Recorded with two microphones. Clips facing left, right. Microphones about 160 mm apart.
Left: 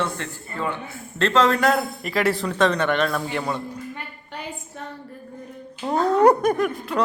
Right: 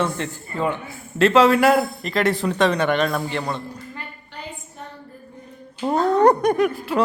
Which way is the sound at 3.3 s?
5° left (ahead or behind).